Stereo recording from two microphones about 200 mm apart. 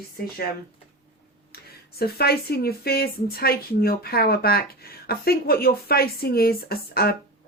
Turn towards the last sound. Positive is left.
turn(degrees=50)  # may be behind; listen again after turning